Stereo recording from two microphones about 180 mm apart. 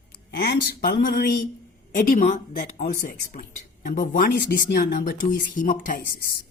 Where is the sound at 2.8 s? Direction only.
50° left (ahead or behind).